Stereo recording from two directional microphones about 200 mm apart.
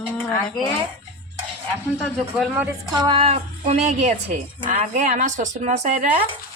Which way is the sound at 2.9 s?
20° right (ahead or behind).